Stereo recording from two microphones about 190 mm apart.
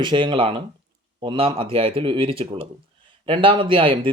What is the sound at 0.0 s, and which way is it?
Speech, 25° right (ahead or behind).